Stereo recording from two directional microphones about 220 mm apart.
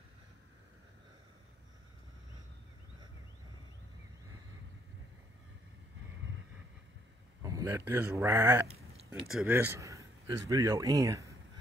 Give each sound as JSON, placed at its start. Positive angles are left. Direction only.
{"t": 7.4, "sound": "speech", "side_deg": -15}
{"t": 8.6, "sound": "a sound", "side_deg": -30}
{"t": 9.3, "sound": "speech", "side_deg": -5}